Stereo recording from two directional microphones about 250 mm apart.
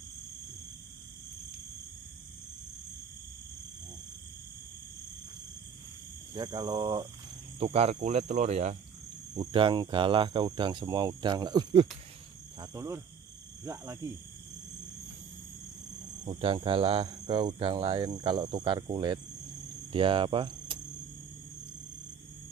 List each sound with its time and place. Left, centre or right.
6.3 s speech: centre
16.3 s speech: right
19.9 s cricket: right